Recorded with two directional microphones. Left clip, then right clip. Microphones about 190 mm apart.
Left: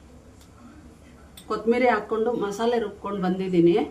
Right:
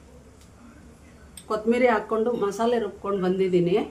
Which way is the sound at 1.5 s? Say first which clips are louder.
Even; 10° right (ahead or behind).